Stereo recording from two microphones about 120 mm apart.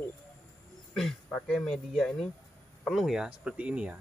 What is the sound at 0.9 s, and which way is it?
Speech, 5° left (ahead or behind).